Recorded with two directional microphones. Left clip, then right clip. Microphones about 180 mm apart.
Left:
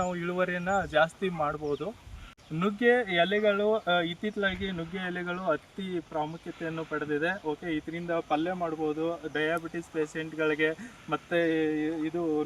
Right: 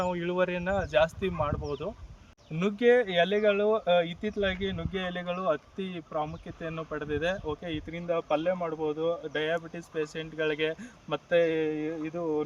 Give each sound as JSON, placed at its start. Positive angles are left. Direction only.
{"t": 0.0, "sound": "speech", "side_deg": -40}
{"t": 6.7, "sound": "speech", "side_deg": -30}
{"t": 8.9, "sound": "speech", "side_deg": -5}
{"t": 9.3, "sound": "speech", "side_deg": -35}